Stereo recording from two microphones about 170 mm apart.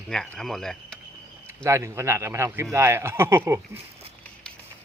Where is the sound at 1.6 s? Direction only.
15° right (ahead or behind).